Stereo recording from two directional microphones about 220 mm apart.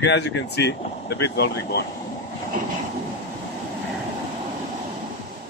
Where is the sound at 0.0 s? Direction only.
50° left (ahead or behind).